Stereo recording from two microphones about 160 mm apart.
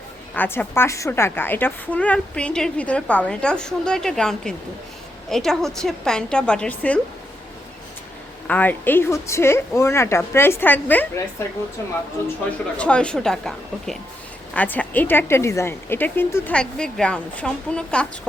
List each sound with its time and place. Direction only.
0.3 s a woman's voice: 10° left (ahead or behind)
8.4 s a woman's voice: 10° left (ahead or behind)
12.7 s a woman's voice: 5° left (ahead or behind)